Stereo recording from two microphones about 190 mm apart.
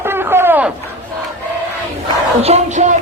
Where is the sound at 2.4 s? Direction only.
35° right (ahead or behind).